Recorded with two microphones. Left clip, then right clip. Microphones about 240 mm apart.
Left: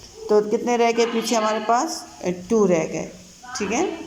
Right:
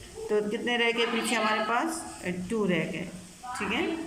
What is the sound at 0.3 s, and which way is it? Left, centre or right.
Speech, centre.